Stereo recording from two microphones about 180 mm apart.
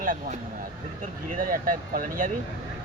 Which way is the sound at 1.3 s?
50° right (ahead or behind).